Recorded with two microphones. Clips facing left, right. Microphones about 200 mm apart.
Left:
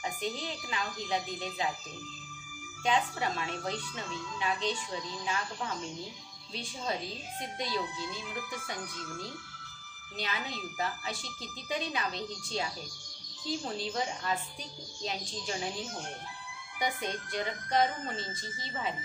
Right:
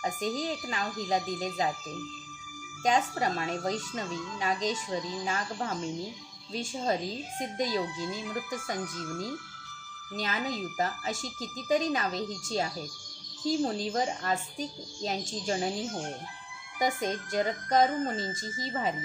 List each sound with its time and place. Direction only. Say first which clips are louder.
0.0 s speech: right 5 dB; 40° right (ahead or behind)
2.8 s speech: right 3 dB; 45° right (ahead or behind)
13.7 s speech: right 4 dB; 45° right (ahead or behind)
16.8 s speech: right 5 dB; 45° right (ahead or behind)